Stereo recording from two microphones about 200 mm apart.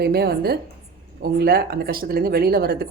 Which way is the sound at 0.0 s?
50° right (ahead or behind).